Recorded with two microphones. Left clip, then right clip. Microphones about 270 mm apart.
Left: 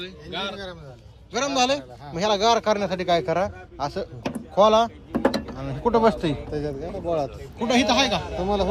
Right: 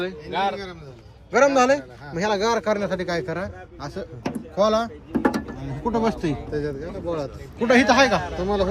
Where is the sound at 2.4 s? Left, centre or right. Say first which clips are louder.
Left 3 dB; left.